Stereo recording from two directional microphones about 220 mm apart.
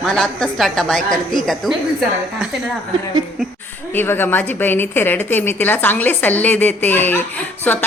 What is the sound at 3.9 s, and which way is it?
A woman's voice, 10° left (ahead or behind).